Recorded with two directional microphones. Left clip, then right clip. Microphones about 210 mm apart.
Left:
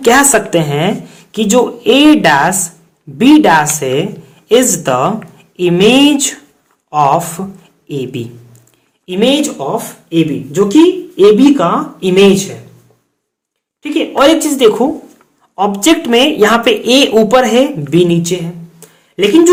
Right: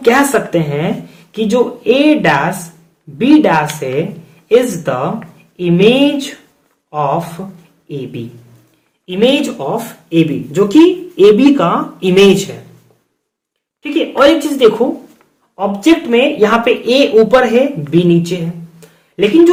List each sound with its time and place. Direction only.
0.0 s speech: 30° left (ahead or behind)
9.0 s speech: 20° left (ahead or behind)
13.8 s a woman's voice: 20° left (ahead or behind)
15.5 s speech: 40° left (ahead or behind)